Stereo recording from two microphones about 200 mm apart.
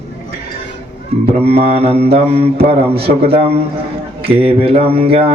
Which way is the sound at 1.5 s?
30° right (ahead or behind).